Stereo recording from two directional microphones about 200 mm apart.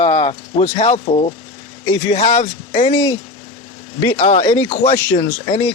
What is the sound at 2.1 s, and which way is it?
Speech, 35° left (ahead or behind).